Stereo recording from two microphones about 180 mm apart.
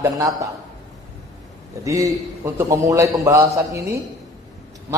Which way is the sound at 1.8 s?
15° right (ahead or behind).